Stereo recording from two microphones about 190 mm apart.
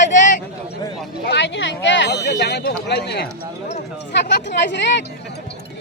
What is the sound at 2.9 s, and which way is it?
Speech, 60° left (ahead or behind).